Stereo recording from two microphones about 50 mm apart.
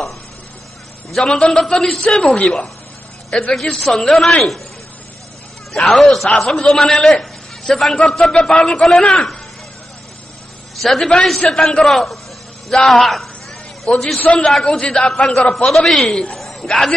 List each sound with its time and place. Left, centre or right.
1.1 s a man's voice: centre
5.7 s a man's voice: centre
10.8 s a man's voice: centre
14.1 s a man's voice: left
14.4 s a man's voice: centre